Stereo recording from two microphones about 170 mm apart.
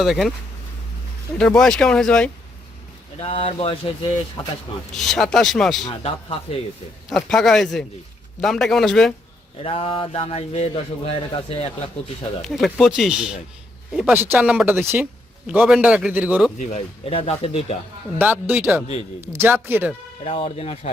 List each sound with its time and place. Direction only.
0.0 s speech: centre (ahead or behind)
1.4 s speech: 5° left (ahead or behind)
3.2 s speech: 35° left (ahead or behind)
4.4 s speech: 20° left (ahead or behind)
4.9 s speech: centre (ahead or behind)
6.0 s speech: 35° left (ahead or behind)
7.3 s speech: centre (ahead or behind)
9.6 s speech: 35° left (ahead or behind)
12.4 s speech: centre (ahead or behind)
16.6 s speech: 40° left (ahead or behind)
18.2 s speech: 10° right (ahead or behind)
20.2 s speech: 35° left (ahead or behind)